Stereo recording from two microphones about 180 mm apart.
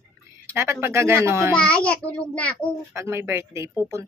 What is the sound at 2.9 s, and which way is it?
Speech, 15° right (ahead or behind).